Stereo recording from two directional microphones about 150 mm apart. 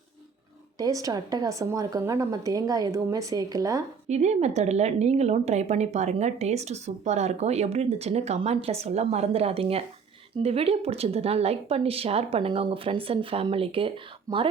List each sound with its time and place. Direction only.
0.8 s speech: 25° right (ahead or behind)
4.1 s a woman's voice: 50° right (ahead or behind)